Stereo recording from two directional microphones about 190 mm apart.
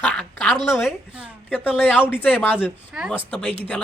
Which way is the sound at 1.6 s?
10° left (ahead or behind).